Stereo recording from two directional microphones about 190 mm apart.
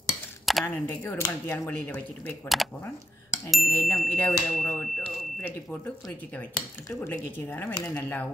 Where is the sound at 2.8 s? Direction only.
15° left (ahead or behind).